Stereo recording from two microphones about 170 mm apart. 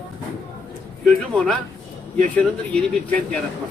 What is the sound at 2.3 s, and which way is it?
A man's voice, 5° left (ahead or behind).